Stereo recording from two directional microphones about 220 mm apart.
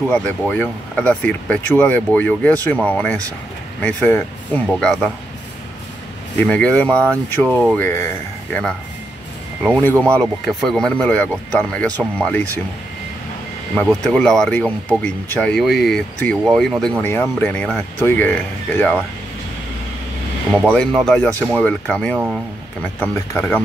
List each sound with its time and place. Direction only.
0.1 s speech: 5° left (ahead or behind)
6.3 s speech: 5° left (ahead or behind)
9.6 s speech: 5° left (ahead or behind)
13.7 s speech: 5° left (ahead or behind)
20.6 s speech: 5° left (ahead or behind)